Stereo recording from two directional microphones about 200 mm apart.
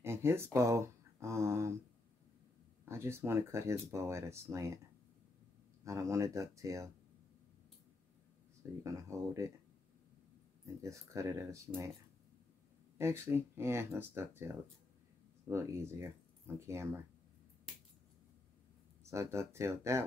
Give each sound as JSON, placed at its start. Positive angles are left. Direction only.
{"t": 0.0, "sound": "speech", "side_deg": -10}
{"t": 2.8, "sound": "speech", "side_deg": -10}
{"t": 5.9, "sound": "speech", "side_deg": -15}
{"t": 8.8, "sound": "speech", "side_deg": -15}
{"t": 10.6, "sound": "speech", "side_deg": -15}
{"t": 12.9, "sound": "speech", "side_deg": -15}
{"t": 19.0, "sound": "speech", "side_deg": -15}